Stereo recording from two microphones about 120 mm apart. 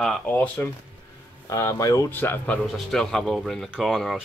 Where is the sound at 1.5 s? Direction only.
25° left (ahead or behind).